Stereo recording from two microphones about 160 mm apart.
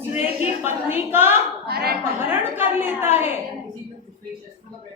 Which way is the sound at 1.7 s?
75° right (ahead or behind).